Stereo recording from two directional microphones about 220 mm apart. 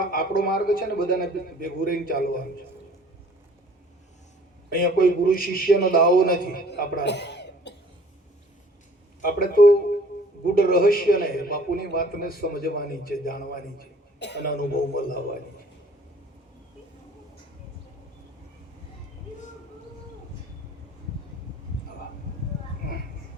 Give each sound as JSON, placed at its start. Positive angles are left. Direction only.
{"t": 0.0, "sound": "a man's voice", "side_deg": 40}
{"t": 4.7, "sound": "a man's voice", "side_deg": 40}
{"t": 9.2, "sound": "a man's voice", "side_deg": 40}